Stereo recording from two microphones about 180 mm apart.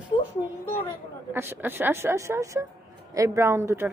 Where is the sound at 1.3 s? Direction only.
15° right (ahead or behind).